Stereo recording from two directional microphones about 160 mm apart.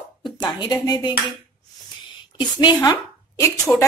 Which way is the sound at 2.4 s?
30° left (ahead or behind).